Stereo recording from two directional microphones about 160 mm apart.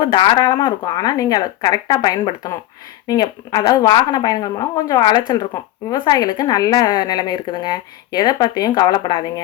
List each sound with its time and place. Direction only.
0.0 s a woman's voice: 30° left (ahead or behind)